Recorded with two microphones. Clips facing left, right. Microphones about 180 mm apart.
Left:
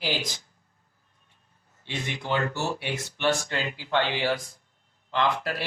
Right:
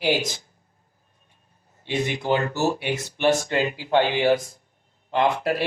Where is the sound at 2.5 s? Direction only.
40° right (ahead or behind).